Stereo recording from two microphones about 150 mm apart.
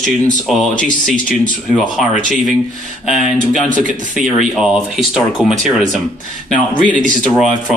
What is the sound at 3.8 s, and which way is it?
Speech, 60° right (ahead or behind).